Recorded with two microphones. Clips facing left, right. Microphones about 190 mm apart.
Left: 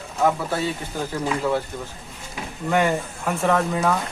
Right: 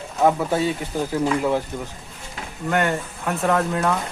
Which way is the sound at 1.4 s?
15° right (ahead or behind).